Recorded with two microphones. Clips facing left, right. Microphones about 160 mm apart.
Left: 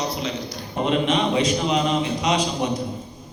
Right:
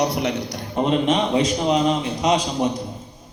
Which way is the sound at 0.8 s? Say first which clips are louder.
Right 2 dB; 40° right (ahead or behind).